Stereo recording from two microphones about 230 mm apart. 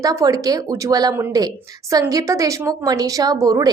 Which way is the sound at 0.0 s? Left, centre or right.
Centre.